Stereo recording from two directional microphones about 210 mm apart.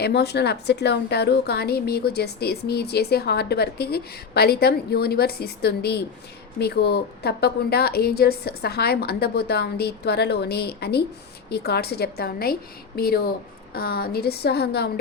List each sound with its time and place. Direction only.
0.0 s a woman's voice: 50° left (ahead or behind)